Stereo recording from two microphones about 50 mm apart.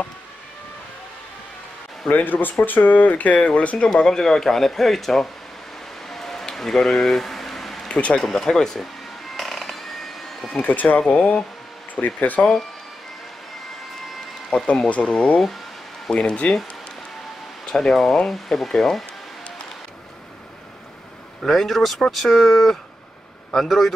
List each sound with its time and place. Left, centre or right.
2.0 s speech: left
3.7 s speech: centre
6.0 s a sound: centre
7.9 s speech: centre
9.4 s a sound: centre
10.6 s speech: left
11.0 s speech: centre
12.2 s speech: left
14.5 s speech: left
17.6 s speech: centre
21.4 s speech: centre